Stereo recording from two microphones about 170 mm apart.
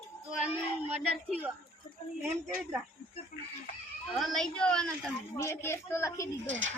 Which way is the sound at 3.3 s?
55° left (ahead or behind).